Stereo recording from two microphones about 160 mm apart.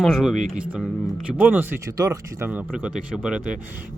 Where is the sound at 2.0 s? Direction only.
20° right (ahead or behind).